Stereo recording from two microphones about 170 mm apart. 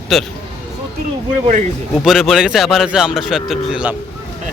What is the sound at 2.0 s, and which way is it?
Speech, centre (ahead or behind).